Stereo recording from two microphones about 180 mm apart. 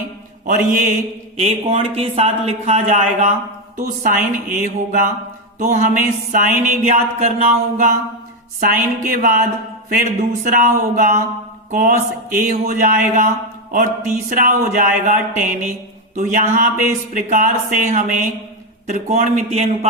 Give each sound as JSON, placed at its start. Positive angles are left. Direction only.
{"t": 0.4, "sound": "speech", "side_deg": -50}
{"t": 1.4, "sound": "speech", "side_deg": -35}
{"t": 4.5, "sound": "a sound", "side_deg": -55}
{"t": 5.5, "sound": "speech", "side_deg": -40}